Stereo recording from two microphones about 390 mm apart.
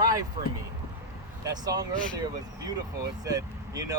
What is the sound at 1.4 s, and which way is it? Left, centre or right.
Speech, centre.